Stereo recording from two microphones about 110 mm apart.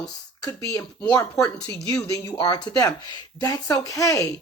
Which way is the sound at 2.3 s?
45° left (ahead or behind).